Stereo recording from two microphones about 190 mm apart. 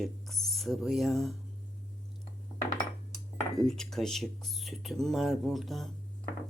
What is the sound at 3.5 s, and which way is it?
Speech, centre (ahead or behind).